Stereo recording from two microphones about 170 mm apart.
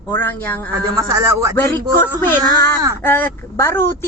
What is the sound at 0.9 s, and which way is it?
Speech, 20° right (ahead or behind).